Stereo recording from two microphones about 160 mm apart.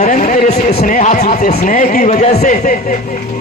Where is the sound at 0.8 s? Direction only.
50° left (ahead or behind).